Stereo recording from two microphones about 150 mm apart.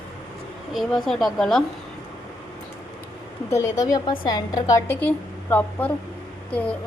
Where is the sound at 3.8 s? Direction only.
25° left (ahead or behind).